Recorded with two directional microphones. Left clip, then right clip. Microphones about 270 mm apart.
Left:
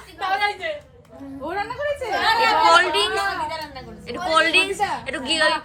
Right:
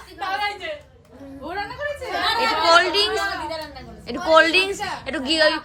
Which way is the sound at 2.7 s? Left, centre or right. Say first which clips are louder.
Even; centre.